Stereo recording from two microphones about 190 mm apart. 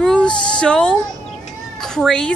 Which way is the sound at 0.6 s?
5° left (ahead or behind).